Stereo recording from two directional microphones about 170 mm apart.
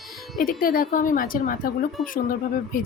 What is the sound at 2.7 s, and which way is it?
Speech, 55° left (ahead or behind).